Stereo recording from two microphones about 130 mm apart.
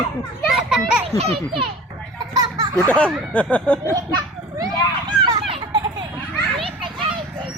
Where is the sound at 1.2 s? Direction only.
45° right (ahead or behind).